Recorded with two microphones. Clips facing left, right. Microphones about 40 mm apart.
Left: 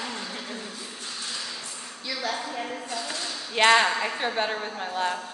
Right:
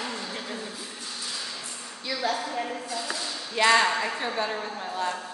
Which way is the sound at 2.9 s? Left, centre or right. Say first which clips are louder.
Even; left.